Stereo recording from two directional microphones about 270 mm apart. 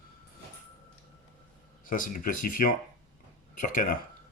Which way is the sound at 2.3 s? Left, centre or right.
Left.